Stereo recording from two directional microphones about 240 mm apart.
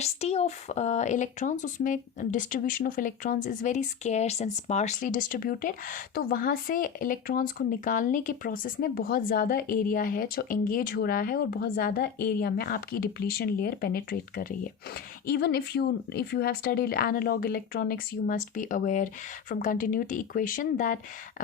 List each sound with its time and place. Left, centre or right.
0.0 s speech: left